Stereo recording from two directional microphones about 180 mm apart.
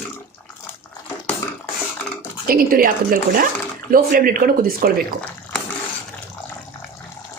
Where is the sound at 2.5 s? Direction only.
55° right (ahead or behind).